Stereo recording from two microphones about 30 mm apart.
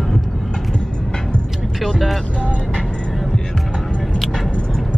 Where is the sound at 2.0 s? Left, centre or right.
Centre.